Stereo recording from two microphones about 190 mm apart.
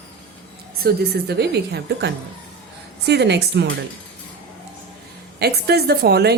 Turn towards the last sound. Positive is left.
turn(degrees=-60)  # may be behind; listen again after turning